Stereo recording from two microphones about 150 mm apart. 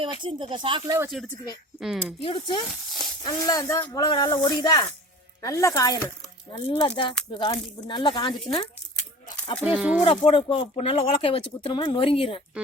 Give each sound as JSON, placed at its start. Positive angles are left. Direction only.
{"t": 0.0, "sound": "speech", "side_deg": -35}
{"t": 1.2, "sound": "speech", "side_deg": 0}
{"t": 2.2, "sound": "speech", "side_deg": 40}
{"t": 3.2, "sound": "speech", "side_deg": 25}
{"t": 9.6, "sound": "speech", "side_deg": -10}
{"t": 10.0, "sound": "speech", "side_deg": 35}